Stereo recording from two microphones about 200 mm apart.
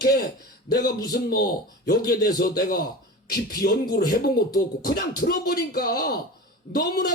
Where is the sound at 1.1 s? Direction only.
50° left (ahead or behind).